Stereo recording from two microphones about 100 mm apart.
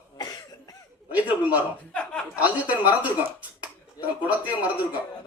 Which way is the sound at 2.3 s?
15° right (ahead or behind).